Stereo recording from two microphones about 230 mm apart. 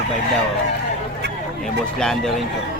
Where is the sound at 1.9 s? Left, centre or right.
Centre.